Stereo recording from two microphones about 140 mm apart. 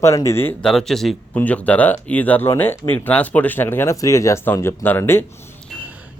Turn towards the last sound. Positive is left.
turn(degrees=15)  # may be behind; listen again after turning